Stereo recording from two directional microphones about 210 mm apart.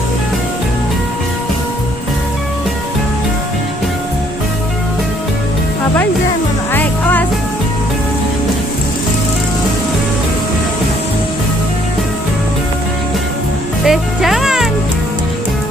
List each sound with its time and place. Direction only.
6.7 s music: 10° left (ahead or behind)
13.8 s music: centre (ahead or behind)